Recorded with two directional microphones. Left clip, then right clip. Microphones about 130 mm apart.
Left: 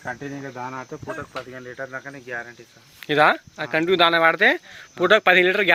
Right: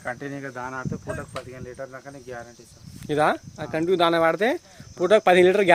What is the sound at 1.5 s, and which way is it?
Cricket, 75° left (ahead or behind).